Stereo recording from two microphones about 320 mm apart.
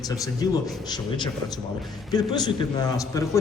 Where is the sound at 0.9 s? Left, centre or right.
Centre.